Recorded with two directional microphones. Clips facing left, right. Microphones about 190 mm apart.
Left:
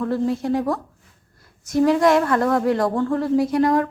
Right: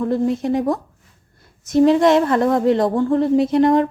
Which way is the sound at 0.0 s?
20° right (ahead or behind).